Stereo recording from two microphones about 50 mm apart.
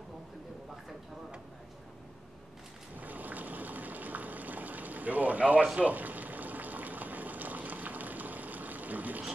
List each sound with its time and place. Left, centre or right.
3.0 s boiling: right